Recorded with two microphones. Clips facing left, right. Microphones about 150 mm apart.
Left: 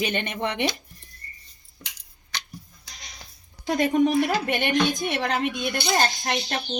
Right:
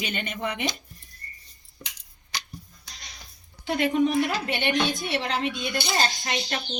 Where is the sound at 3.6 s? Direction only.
40° left (ahead or behind).